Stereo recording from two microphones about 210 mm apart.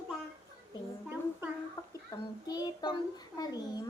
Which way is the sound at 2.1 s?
20° left (ahead or behind).